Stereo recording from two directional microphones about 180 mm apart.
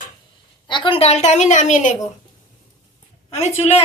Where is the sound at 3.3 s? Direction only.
35° left (ahead or behind).